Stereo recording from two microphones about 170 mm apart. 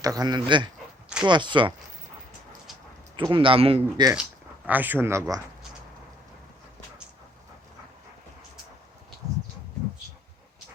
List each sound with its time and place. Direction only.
0.0 s a man's voice: 20° right (ahead or behind)
3.2 s a man's voice: 30° right (ahead or behind)
4.1 s speech: 10° right (ahead or behind)